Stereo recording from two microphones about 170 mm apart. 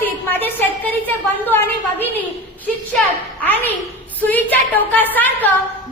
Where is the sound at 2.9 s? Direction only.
10° left (ahead or behind).